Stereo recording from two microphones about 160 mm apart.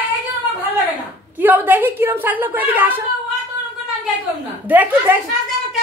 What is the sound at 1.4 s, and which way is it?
A woman's voice, 10° right (ahead or behind).